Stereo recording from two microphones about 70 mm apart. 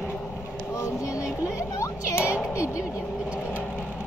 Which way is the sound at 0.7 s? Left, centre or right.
Left.